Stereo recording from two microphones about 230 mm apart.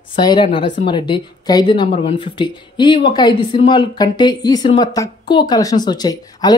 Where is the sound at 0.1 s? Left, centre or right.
Centre.